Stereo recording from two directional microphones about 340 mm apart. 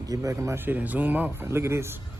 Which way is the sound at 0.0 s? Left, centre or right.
Centre.